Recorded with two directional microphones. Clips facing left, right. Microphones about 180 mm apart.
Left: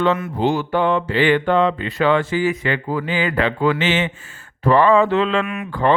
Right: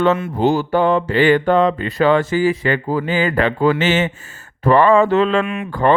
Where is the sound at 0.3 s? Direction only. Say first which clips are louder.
Right 3 dB; 35° right (ahead or behind).